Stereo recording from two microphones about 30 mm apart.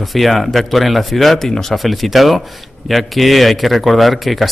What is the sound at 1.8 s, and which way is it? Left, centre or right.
Speech, centre.